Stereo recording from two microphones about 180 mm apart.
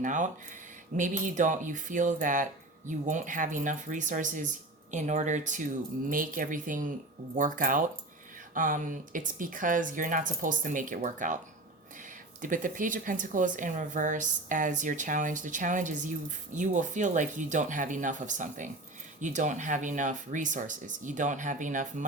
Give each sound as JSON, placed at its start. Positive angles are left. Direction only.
{"t": 0.0, "sound": "speech", "side_deg": -45}
{"t": 12.4, "sound": "speech", "side_deg": -45}